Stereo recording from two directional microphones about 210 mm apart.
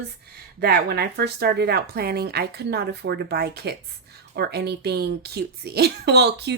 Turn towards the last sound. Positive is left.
turn(degrees=-55)  # may be behind; listen again after turning